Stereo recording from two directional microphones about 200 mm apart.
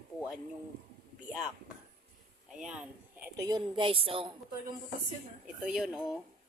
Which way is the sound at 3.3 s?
20° right (ahead or behind).